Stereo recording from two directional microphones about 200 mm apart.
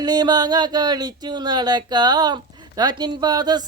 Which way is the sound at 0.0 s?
20° right (ahead or behind).